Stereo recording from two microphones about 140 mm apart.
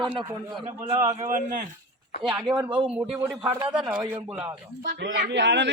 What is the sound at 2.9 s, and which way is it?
Speech, 5° right (ahead or behind).